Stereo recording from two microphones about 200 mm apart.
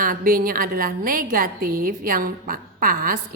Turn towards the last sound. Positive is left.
turn(degrees=-45)  # may be behind; listen again after turning